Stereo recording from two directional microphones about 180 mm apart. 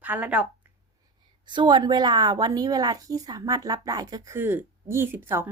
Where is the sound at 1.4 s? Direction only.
25° right (ahead or behind).